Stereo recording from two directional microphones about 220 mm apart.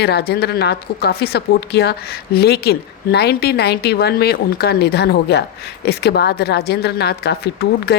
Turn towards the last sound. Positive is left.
turn(degrees=45)  # may be behind; listen again after turning